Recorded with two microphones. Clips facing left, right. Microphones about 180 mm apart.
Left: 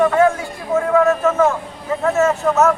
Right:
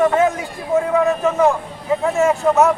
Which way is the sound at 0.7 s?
15° right (ahead or behind).